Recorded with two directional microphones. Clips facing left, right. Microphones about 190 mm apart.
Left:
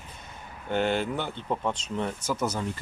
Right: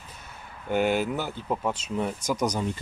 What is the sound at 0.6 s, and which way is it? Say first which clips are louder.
Speech: right 2 dB; 10° right (ahead or behind).